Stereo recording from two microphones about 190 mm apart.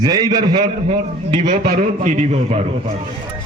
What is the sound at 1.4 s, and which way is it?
A man's voice, 50° right (ahead or behind).